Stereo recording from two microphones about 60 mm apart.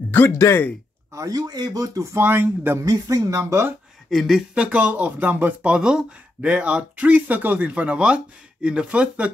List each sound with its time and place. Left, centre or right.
0.1 s a sound: left
0.4 s speech: left
1.1 s speech: right
2.2 s speech: right
2.8 s speech: right
4.1 s speech: centre
4.6 s speech: right
5.7 s speech: centre